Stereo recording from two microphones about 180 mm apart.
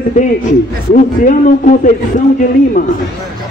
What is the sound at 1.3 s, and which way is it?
Speech, 45° left (ahead or behind).